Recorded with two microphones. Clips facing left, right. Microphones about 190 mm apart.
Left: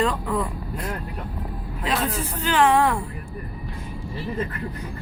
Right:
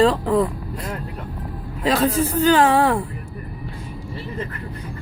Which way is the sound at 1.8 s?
40° right (ahead or behind).